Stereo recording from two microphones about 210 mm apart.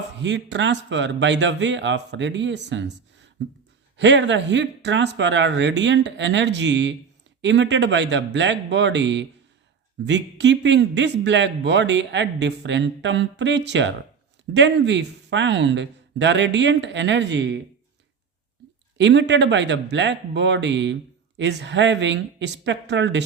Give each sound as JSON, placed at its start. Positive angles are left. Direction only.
{"t": 0.2, "sound": "speech", "side_deg": -55}
{"t": 18.9, "sound": "speech", "side_deg": -55}